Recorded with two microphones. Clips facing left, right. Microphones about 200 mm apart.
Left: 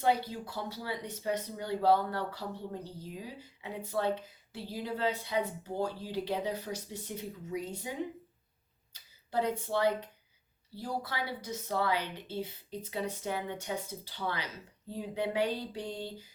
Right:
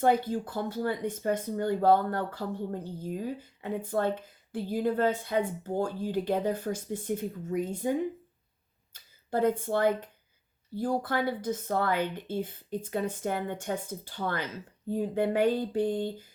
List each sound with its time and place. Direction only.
0.0 s speech: 50° right (ahead or behind)